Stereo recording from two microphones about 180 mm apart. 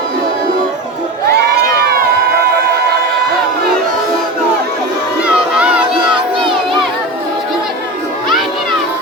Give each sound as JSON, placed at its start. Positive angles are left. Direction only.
{"t": 1.6, "sound": "crowd", "side_deg": -60}
{"t": 5.2, "sound": "crowd", "side_deg": -5}